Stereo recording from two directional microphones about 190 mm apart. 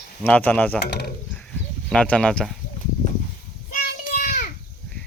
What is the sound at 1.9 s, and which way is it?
Speech, 5° left (ahead or behind).